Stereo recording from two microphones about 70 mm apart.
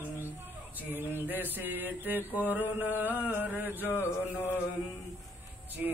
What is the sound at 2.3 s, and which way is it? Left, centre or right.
Music, left.